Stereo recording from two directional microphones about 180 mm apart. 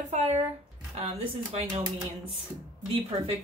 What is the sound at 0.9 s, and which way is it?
Speech, 35° right (ahead or behind).